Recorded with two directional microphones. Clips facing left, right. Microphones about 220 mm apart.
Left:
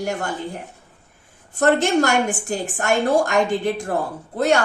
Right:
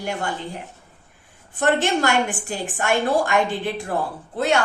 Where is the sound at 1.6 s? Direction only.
40° left (ahead or behind).